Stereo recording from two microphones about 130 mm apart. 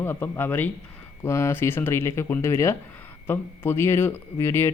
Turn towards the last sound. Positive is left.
turn(degrees=20)  # may be behind; listen again after turning